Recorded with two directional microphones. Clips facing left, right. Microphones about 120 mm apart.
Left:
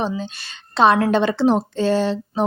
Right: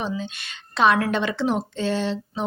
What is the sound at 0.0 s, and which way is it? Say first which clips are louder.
Speech: left 4 dB; 30° left (ahead or behind).